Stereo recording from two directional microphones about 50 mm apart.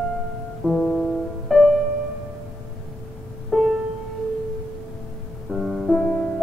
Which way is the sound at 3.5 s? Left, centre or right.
Centre.